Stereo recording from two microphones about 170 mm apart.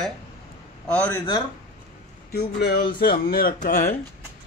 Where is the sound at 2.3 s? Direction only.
70° left (ahead or behind); by 3.9 s 55° left (ahead or behind).